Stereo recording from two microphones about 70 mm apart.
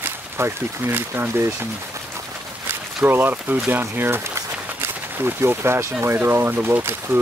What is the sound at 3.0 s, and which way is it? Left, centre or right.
Speech, right.